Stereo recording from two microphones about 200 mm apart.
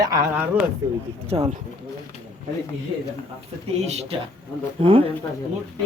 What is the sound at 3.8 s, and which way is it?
Speech, 35° right (ahead or behind).